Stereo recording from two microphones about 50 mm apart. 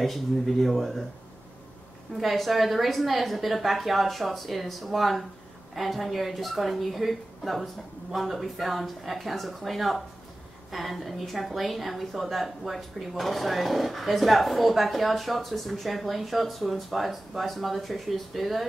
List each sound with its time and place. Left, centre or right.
0.0 s a woman's voice: centre
2.1 s a woman's voice: centre